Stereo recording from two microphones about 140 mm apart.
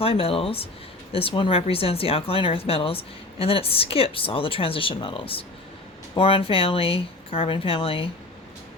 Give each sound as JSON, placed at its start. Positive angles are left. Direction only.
{"t": 0.0, "sound": "speech", "side_deg": 45}